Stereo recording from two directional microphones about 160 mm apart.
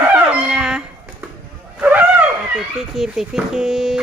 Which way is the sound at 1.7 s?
10° right (ahead or behind).